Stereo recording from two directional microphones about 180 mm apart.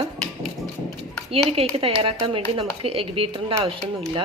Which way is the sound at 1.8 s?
30° right (ahead or behind).